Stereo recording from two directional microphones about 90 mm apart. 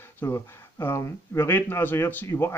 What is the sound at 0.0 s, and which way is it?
Speech, 25° left (ahead or behind).